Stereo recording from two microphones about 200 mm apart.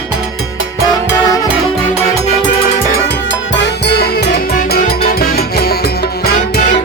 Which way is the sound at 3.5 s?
60° left (ahead or behind).